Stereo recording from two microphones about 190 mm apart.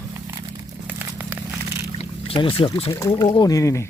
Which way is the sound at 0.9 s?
10° right (ahead or behind).